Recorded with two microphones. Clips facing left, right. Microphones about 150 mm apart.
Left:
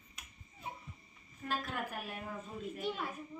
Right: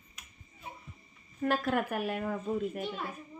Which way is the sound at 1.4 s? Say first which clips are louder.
Right 10 dB; 65° right (ahead or behind).